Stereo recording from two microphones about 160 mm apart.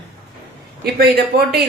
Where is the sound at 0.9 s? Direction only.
75° right (ahead or behind).